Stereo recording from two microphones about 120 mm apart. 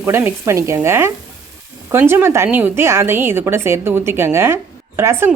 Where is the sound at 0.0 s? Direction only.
20° right (ahead or behind).